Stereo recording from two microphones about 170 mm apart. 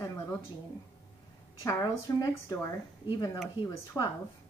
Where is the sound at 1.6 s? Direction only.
20° left (ahead or behind).